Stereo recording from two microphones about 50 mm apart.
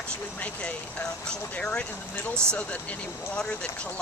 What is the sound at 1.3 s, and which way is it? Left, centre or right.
Speech, centre.